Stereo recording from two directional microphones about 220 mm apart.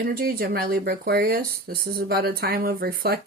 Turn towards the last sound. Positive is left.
turn(degrees=-45)  # may be behind; listen again after turning